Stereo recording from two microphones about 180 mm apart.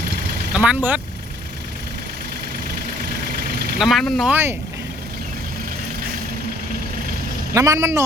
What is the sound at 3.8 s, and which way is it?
Speech, centre (ahead or behind).